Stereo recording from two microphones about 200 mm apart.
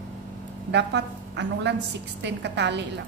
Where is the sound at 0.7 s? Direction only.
60° right (ahead or behind).